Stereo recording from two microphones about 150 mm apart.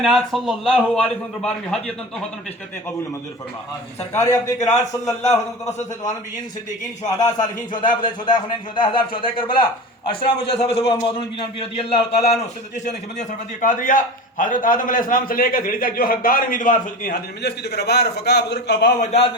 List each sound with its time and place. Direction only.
0.0 s a man's voice: centre (ahead or behind)
4.1 s a man's voice: 20° left (ahead or behind)
7.1 s a man's voice: 25° left (ahead or behind); by 18.9 s 90° left
18.9 s a man's voice: 40° left (ahead or behind)